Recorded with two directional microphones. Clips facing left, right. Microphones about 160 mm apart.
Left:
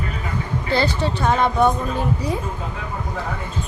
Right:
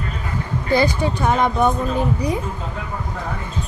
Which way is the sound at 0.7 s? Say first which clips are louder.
Right 3 dB; 15° right (ahead or behind).